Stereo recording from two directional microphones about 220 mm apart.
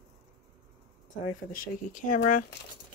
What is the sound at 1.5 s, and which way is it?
Speech, 40° left (ahead or behind).